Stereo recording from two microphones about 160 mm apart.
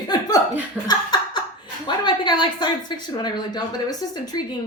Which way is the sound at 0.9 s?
25° left (ahead or behind).